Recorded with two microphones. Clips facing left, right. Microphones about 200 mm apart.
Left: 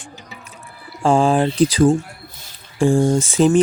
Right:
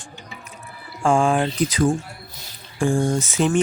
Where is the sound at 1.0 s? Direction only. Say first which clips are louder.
Left 3 dB; 35° left (ahead or behind).